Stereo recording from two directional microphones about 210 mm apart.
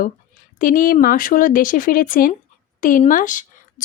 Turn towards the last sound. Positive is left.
turn(degrees=40)  # may be behind; listen again after turning